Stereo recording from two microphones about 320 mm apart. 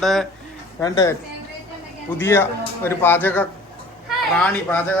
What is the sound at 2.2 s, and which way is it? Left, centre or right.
A woman's voice, centre.